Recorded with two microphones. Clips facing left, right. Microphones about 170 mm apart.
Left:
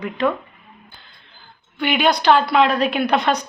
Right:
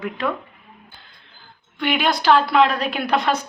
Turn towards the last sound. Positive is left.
turn(degrees=0)  # may be behind; listen again after turning